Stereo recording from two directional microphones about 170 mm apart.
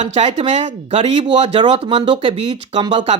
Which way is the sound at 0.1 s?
40° right (ahead or behind).